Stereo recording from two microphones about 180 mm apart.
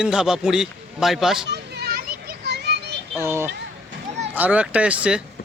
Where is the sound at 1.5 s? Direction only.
65° right (ahead or behind).